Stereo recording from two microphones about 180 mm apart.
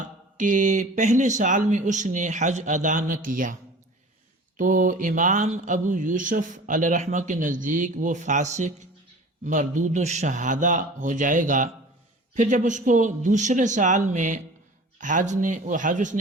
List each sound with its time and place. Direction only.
0.3 s speech: 45° right (ahead or behind)